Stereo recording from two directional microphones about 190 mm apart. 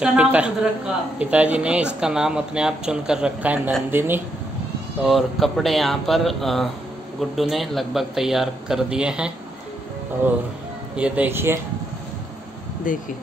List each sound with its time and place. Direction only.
0.0 s a man's voice: 5° right (ahead or behind)
11.0 s a man's voice: 5° right (ahead or behind)
12.9 s speech: 45° left (ahead or behind)